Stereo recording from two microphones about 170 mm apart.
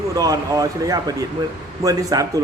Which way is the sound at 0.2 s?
20° right (ahead or behind).